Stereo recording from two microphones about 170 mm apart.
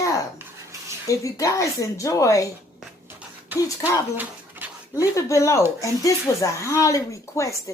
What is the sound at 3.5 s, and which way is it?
Speech, 10° right (ahead or behind).